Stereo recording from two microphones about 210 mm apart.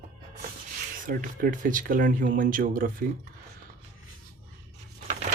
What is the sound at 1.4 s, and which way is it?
Speech, 40° right (ahead or behind).